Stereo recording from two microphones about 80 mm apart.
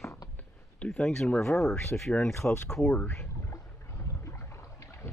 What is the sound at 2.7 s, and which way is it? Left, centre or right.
Speech, centre.